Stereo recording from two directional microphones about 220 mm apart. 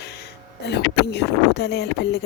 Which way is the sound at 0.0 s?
50° left (ahead or behind).